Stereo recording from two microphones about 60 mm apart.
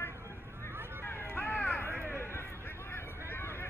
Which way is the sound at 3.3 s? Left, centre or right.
Left.